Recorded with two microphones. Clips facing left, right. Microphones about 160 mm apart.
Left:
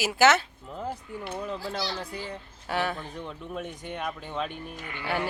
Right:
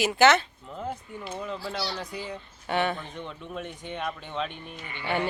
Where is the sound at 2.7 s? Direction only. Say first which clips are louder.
Right 2 dB; centre (ahead or behind).